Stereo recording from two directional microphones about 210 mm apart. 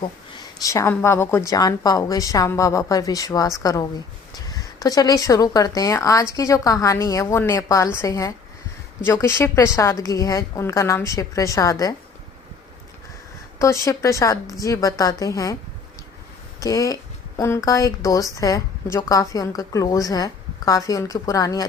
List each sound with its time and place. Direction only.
0.3 s a woman's voice: 15° left (ahead or behind)
13.6 s a woman's voice: 15° left (ahead or behind)
16.6 s a woman's voice: 15° left (ahead or behind)